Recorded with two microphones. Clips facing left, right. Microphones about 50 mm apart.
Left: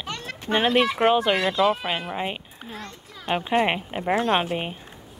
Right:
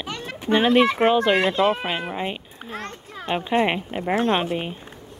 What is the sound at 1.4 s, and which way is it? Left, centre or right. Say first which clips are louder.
Speech: right 1 dB; right.